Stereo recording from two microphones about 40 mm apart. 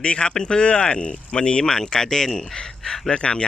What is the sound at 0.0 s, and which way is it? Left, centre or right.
Speech, left.